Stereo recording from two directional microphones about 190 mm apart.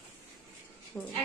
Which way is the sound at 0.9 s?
10° left (ahead or behind).